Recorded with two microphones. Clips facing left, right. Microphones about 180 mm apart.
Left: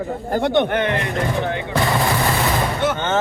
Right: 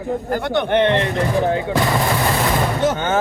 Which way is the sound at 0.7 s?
30° right (ahead or behind).